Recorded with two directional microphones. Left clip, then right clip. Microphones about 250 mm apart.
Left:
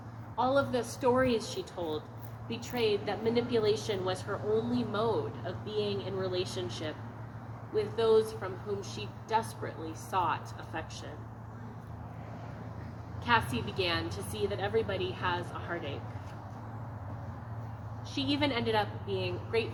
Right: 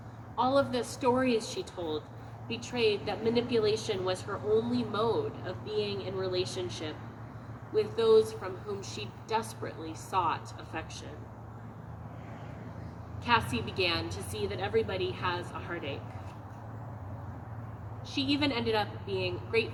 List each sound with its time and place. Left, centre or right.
0.3 s a woman's voice: right
13.2 s a woman's voice: right
18.1 s a woman's voice: right